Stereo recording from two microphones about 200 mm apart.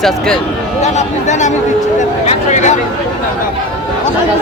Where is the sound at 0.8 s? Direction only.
35° left (ahead or behind).